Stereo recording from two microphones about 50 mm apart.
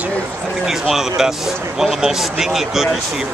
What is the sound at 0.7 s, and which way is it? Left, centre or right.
Speech, centre.